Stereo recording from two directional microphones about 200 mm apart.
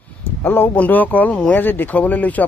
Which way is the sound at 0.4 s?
10° left (ahead or behind).